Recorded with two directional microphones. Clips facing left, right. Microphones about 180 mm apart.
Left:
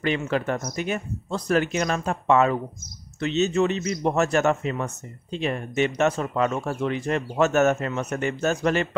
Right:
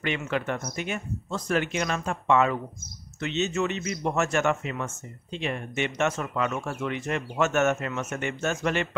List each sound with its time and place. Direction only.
0.0 s a man's voice: 35° left (ahead or behind)